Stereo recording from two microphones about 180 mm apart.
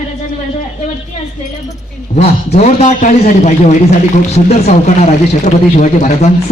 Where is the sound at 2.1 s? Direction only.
35° left (ahead or behind).